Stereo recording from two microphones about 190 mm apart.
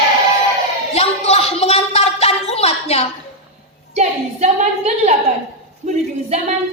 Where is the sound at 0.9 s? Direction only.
35° left (ahead or behind).